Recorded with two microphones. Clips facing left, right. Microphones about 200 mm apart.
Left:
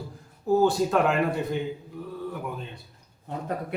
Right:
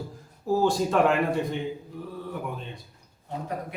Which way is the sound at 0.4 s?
Centre (ahead or behind).